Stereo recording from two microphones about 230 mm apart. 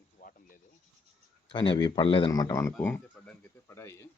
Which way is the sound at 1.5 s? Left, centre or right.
Centre.